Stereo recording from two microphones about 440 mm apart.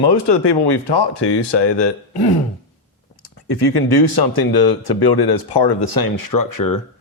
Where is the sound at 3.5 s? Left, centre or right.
Left.